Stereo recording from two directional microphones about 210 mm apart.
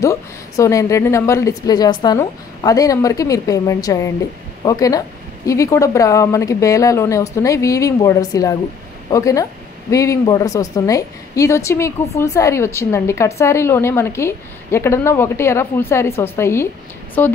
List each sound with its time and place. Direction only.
0.0 s a woman's voice: 15° left (ahead or behind)